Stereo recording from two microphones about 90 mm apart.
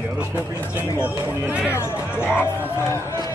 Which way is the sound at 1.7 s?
25° left (ahead or behind).